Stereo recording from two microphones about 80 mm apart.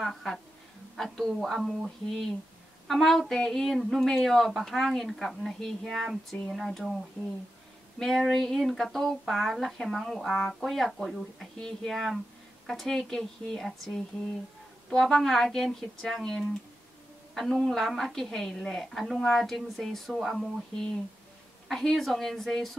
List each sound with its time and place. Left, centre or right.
0.0 s speech: centre
7.2 s speech: centre
8.0 s speech: centre
21.6 s speech: centre